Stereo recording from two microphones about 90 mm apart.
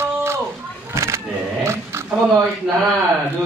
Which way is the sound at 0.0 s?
30° right (ahead or behind).